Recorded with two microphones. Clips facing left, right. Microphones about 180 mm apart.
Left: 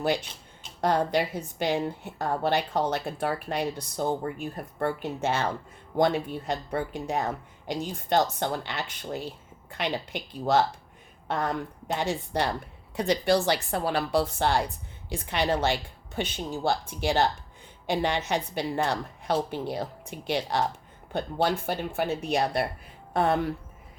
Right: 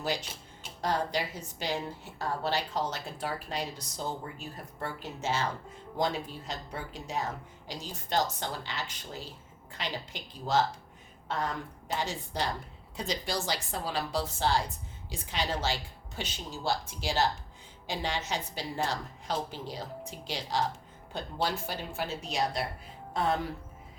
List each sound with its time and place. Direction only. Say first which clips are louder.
0.0 s a woman's voice: left 6 dB; 55° left (ahead or behind)